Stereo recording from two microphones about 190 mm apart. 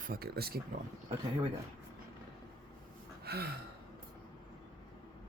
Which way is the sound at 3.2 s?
55° right (ahead or behind).